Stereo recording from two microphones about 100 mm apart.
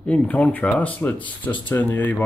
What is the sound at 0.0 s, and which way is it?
Speech, 15° left (ahead or behind).